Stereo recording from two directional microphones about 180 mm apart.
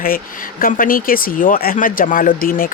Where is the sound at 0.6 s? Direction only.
50° left (ahead or behind).